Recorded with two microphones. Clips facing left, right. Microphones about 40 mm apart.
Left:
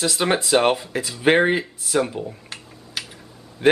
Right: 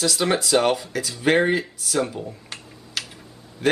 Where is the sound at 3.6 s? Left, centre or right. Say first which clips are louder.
Left 4 dB; left.